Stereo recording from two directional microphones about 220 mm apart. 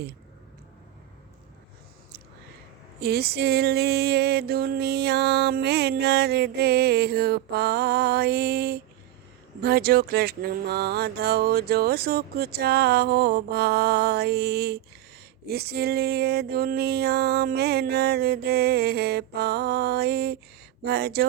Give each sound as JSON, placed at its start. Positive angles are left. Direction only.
{"t": 3.0, "sound": "music", "side_deg": -45}